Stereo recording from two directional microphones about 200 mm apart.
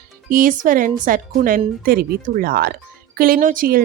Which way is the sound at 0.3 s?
45° right (ahead or behind).